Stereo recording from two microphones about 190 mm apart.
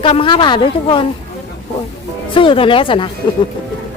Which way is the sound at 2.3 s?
25° left (ahead or behind).